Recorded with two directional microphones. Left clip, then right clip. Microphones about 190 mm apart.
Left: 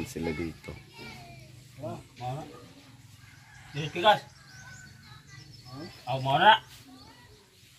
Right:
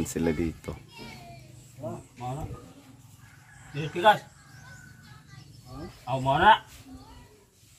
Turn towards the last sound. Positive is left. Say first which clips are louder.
# right 1 dB
turn(degrees=5)  # may be behind; listen again after turning